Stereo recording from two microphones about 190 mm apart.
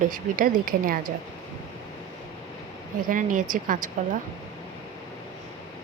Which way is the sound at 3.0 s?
45° right (ahead or behind).